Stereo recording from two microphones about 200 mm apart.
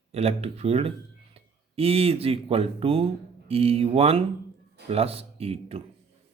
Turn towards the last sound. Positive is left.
turn(degrees=-30)  # may be behind; listen again after turning